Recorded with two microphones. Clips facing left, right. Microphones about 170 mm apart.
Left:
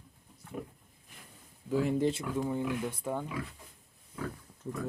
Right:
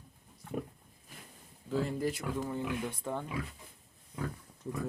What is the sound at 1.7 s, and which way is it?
Speech, 10° left (ahead or behind).